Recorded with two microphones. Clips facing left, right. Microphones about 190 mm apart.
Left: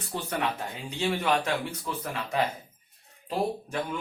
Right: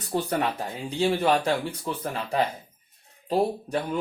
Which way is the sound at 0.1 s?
35° right (ahead or behind).